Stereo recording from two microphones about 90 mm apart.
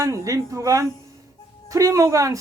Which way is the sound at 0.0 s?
35° right (ahead or behind).